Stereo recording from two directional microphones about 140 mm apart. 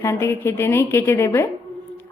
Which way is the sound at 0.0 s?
20° left (ahead or behind).